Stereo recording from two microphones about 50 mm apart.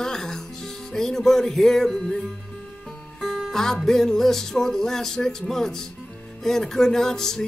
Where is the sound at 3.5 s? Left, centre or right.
Centre.